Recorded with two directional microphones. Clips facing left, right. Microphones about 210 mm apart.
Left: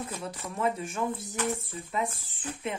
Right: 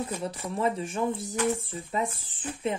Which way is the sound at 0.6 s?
30° right (ahead or behind).